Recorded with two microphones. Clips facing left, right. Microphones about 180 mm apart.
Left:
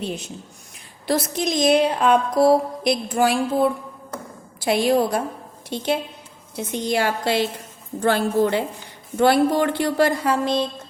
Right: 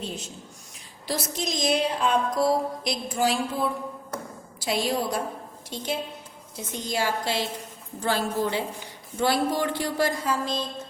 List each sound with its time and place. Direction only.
1.0 s a woman's voice: 60° left (ahead or behind)